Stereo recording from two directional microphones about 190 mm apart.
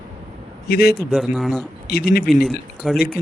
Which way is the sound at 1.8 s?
55° left (ahead or behind).